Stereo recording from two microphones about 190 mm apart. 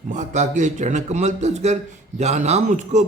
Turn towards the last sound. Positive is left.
turn(degrees=-40)  # may be behind; listen again after turning